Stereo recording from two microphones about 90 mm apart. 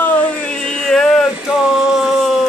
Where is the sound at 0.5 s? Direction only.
10° left (ahead or behind).